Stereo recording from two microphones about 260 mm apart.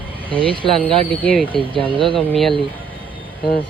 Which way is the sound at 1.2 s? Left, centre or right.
Centre.